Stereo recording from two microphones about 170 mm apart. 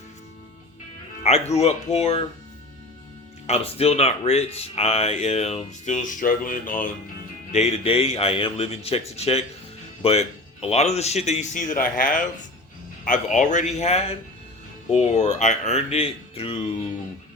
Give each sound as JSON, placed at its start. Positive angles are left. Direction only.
{"t": 1.2, "sound": "speech", "side_deg": 40}
{"t": 3.4, "sound": "speech", "side_deg": 35}
{"t": 7.5, "sound": "speech", "side_deg": 35}